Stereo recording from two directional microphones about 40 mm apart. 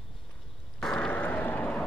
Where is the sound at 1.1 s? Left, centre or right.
Left.